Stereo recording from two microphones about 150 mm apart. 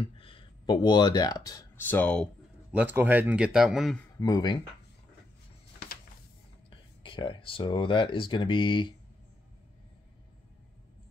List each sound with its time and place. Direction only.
0.0 s speech: 35° left (ahead or behind)
1.8 s speech: 10° left (ahead or behind)
2.7 s speech: 10° right (ahead or behind)
4.2 s speech: 25° left (ahead or behind)
7.0 s speech: 35° left (ahead or behind)